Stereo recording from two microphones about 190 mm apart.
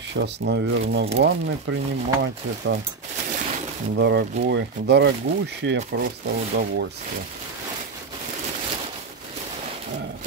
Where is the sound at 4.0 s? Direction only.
65° right (ahead or behind).